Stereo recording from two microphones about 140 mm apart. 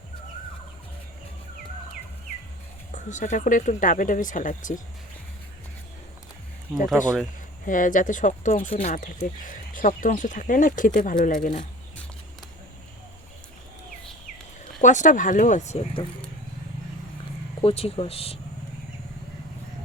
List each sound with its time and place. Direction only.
2.9 s speech: 60° left (ahead or behind)
7.0 s speech: 65° left (ahead or behind)
8.7 s speech: 50° left (ahead or behind)
9.0 s speech: 70° left (ahead or behind)
14.8 s speech: 60° left (ahead or behind)
17.6 s speech: 45° left (ahead or behind)